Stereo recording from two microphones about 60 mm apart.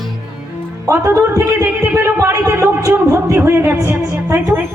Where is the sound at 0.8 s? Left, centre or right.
Right.